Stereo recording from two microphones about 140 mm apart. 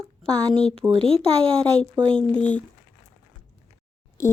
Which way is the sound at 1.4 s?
5° left (ahead or behind).